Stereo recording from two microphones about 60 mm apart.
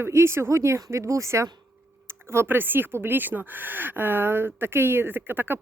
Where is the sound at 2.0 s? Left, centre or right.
Right.